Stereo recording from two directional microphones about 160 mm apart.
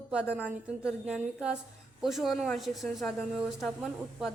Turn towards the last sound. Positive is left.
turn(degrees=0)  # may be behind; listen again after turning